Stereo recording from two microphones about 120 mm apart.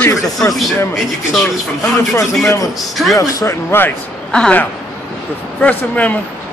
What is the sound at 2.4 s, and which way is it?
Speech, 25° left (ahead or behind).